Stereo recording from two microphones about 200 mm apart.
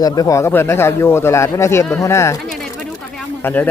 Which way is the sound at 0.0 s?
15° left (ahead or behind).